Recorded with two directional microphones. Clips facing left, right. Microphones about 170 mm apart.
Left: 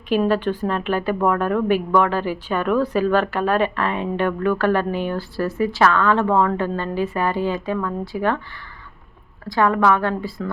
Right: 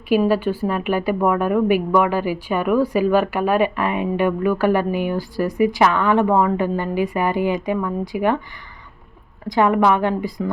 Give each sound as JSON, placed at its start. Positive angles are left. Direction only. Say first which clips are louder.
{"t": 0.1, "sound": "a woman's voice", "louder": "right 2 dB", "side_deg": -10}
{"t": 9.5, "sound": "a woman's voice", "louder": "right 2 dB", "side_deg": -20}